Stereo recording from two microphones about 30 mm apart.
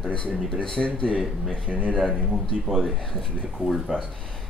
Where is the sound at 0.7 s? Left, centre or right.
Left.